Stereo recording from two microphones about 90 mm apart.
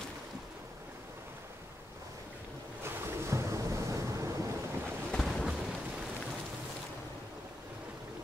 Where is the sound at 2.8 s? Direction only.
30° right (ahead or behind).